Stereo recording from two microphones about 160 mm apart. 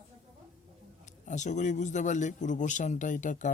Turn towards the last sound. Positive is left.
turn(degrees=50)  # may be behind; listen again after turning